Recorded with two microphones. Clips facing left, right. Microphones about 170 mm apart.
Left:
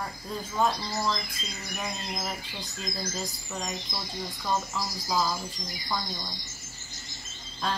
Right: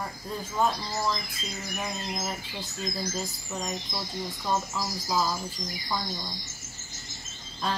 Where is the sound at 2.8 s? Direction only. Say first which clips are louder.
Right 2 dB; 5° right (ahead or behind).